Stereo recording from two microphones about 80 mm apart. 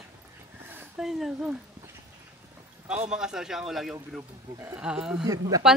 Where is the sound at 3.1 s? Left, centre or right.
Centre.